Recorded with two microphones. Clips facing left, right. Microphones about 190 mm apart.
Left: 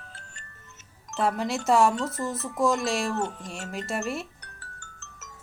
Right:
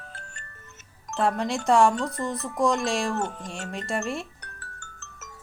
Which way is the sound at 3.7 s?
5° left (ahead or behind).